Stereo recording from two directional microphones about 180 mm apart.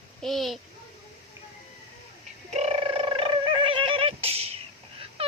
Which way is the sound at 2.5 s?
35° right (ahead or behind).